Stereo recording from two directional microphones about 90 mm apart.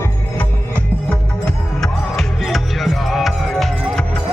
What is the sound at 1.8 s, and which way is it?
Music, centre (ahead or behind).